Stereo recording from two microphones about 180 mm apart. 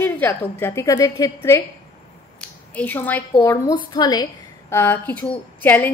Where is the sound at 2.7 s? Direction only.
10° left (ahead or behind).